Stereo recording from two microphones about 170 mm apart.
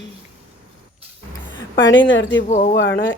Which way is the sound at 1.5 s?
90° left.